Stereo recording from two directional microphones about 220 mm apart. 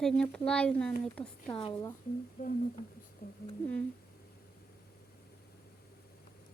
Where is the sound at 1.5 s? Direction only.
25° left (ahead or behind).